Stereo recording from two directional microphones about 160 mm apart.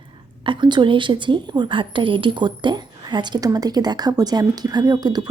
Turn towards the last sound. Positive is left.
turn(degrees=-25)  # may be behind; listen again after turning